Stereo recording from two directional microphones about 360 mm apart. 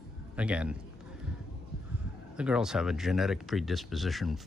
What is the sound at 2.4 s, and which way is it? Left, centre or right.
Speech, centre.